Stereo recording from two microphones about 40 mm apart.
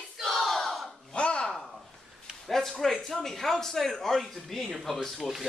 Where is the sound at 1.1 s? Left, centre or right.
Left.